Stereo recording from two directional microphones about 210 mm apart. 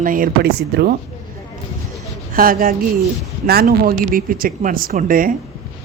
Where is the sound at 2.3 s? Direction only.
45° right (ahead or behind).